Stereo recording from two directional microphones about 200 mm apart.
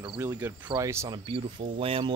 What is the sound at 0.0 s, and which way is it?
Cricket, 20° right (ahead or behind).